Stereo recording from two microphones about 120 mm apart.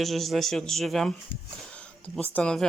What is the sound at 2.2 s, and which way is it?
Speech, 10° left (ahead or behind).